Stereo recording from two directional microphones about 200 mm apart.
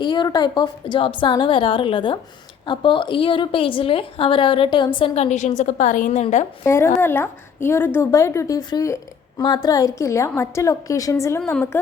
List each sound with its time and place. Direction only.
0.0 s a woman's voice: 20° left (ahead or behind)
6.7 s a woman's voice: 10° left (ahead or behind)